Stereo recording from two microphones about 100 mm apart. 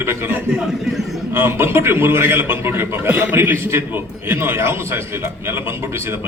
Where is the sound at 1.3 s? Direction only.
25° right (ahead or behind).